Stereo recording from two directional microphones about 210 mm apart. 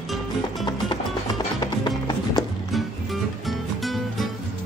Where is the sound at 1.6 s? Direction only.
20° left (ahead or behind).